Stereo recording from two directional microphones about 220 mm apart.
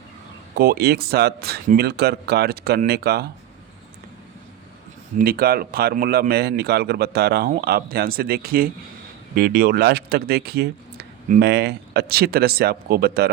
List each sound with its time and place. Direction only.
0.5 s a man's voice: 45° right (ahead or behind)
5.1 s a man's voice: 45° right (ahead or behind)